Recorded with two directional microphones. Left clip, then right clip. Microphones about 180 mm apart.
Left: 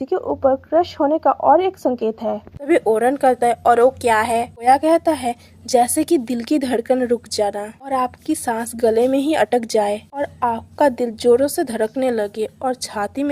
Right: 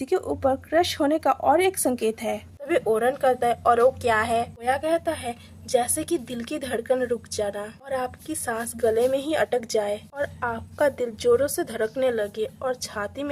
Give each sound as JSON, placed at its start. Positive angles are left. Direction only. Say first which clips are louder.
{"t": 0.1, "sound": "a woman's voice", "louder": "left 6 dB", "side_deg": -5}
{"t": 2.0, "sound": "a woman's voice", "louder": "left 4 dB", "side_deg": 20}